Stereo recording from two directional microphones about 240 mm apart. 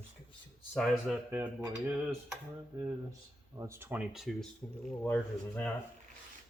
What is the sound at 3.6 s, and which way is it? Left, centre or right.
Speech, centre.